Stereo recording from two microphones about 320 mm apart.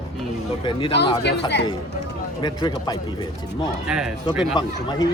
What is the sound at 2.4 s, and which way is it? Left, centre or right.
Speech, centre.